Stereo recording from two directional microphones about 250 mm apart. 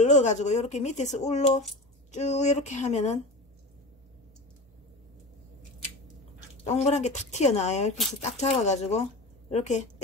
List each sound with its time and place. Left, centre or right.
0.0 s speech: left
6.6 s a woman's voice: left